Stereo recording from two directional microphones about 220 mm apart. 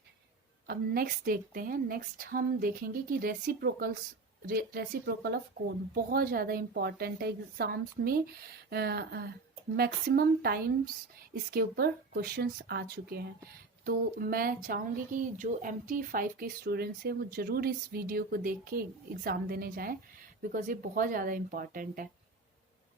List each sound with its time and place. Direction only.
0.7 s a woman's voice: 45° right (ahead or behind)